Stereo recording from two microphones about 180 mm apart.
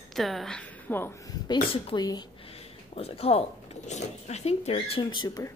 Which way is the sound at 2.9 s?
35° left (ahead or behind).